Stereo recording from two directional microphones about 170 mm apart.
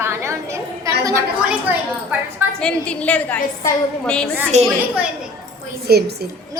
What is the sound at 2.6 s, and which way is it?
A woman's voice, 5° left (ahead or behind).